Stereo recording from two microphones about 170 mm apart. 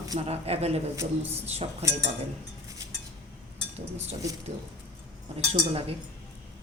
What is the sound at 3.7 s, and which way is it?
Speech, 40° right (ahead or behind).